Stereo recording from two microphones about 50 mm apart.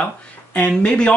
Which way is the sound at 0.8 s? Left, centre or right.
Left.